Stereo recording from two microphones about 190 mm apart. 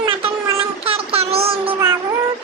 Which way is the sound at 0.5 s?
30° right (ahead or behind).